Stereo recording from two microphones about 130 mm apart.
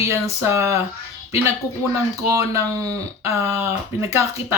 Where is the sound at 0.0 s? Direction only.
20° right (ahead or behind).